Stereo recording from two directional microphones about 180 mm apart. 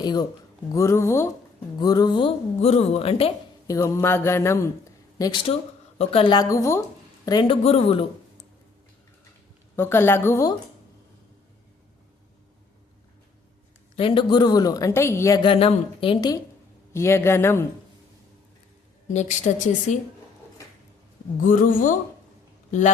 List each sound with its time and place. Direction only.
0.0 s speech: 25° left (ahead or behind)
0.7 s mantra: 15° left (ahead or behind)
1.8 s speech: 20° left (ahead or behind)
3.7 s mantra: 15° left (ahead or behind)
5.1 s a woman's voice: 25° left (ahead or behind)
7.3 s speech: 25° left (ahead or behind)
9.7 s mantra: 15° left (ahead or behind)
13.9 s a woman's voice: 30° left (ahead or behind)
16.9 s mantra: 15° left (ahead or behind)
19.0 s speech: 40° left (ahead or behind)
21.4 s speech: 50° left (ahead or behind)